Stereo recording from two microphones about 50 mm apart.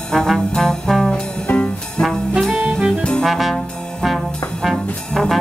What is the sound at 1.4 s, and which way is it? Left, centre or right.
Music, left.